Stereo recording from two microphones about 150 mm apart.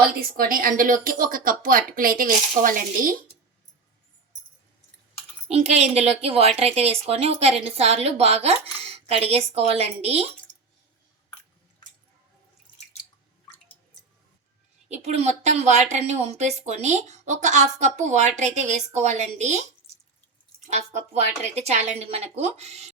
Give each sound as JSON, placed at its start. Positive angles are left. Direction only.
{"t": 0.1, "sound": "speech", "side_deg": -80}
{"t": 5.5, "sound": "a woman's voice", "side_deg": -45}
{"t": 14.8, "sound": "a woman's voice", "side_deg": -50}
{"t": 20.7, "sound": "a woman's voice", "side_deg": -50}